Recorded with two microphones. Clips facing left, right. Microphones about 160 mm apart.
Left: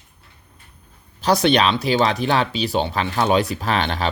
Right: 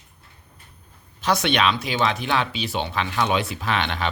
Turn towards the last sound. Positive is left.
turn(degrees=35)  # may be behind; listen again after turning